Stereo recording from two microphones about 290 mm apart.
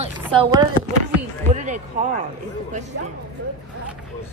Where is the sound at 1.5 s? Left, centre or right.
Right.